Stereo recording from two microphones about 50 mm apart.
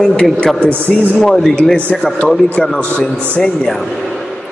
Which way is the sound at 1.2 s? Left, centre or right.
Centre.